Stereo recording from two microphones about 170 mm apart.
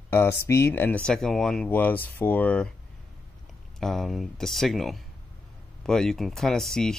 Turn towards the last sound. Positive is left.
turn(degrees=0)  # may be behind; listen again after turning